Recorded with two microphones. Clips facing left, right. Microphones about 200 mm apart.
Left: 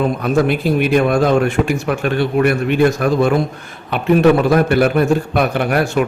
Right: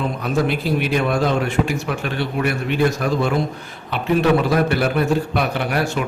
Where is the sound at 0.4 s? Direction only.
55° left (ahead or behind).